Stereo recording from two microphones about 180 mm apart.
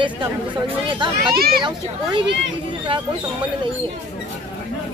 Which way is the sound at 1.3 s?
60° right (ahead or behind).